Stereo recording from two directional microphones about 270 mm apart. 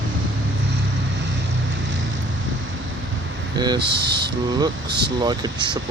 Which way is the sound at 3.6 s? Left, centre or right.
Centre.